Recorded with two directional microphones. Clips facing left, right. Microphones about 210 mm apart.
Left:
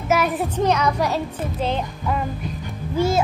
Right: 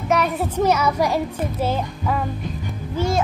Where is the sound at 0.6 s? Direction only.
5° right (ahead or behind).